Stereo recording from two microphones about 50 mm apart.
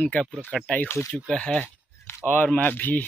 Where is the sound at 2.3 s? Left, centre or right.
Left.